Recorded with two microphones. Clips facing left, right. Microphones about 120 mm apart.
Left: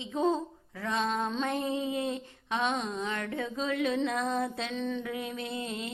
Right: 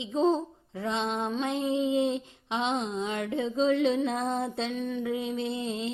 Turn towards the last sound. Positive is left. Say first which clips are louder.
# right 5 dB
turn(degrees=-25)  # may be behind; listen again after turning